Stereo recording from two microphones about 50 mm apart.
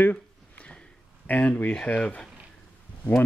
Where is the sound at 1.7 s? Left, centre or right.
Left.